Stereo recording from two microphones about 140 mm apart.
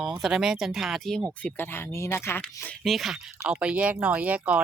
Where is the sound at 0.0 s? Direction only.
5° right (ahead or behind).